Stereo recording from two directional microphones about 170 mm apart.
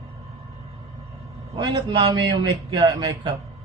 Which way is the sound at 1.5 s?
20° right (ahead or behind).